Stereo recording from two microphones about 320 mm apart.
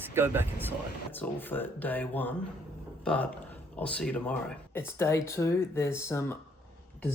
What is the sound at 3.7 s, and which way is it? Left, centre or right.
Speech, centre.